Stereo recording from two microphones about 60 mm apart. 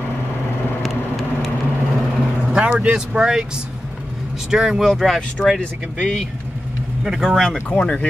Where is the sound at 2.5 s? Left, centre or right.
Right.